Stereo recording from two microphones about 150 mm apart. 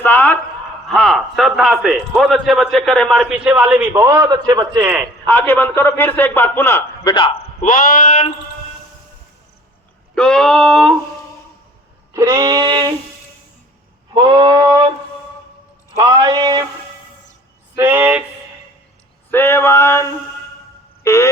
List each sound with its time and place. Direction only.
0.0 s a sound: 10° left (ahead or behind)
0.9 s a man's voice: centre (ahead or behind)
3.9 s speech: 20° right (ahead or behind)
4.8 s a man's voice: 10° right (ahead or behind)
5.2 s a man's voice: 15° left (ahead or behind)
7.1 s a man's voice: 35° left (ahead or behind)
7.6 s speech: 65° left (ahead or behind)
10.2 s a man's voice: 5° left (ahead or behind)
12.1 s speech: 20° right (ahead or behind)
14.1 s speech: 30° right (ahead or behind)
16.0 s speech: 25° right (ahead or behind)
17.7 s a man's voice: 10° right (ahead or behind)
19.3 s a man's voice: 15° left (ahead or behind)
21.0 s music: 20° left (ahead or behind)